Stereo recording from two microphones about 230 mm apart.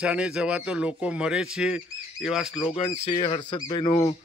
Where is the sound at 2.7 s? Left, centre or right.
Left.